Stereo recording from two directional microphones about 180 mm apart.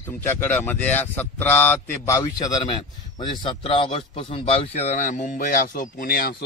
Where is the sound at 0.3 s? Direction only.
10° left (ahead or behind).